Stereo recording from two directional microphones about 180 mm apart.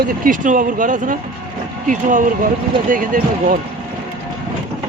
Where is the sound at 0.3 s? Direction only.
45° right (ahead or behind).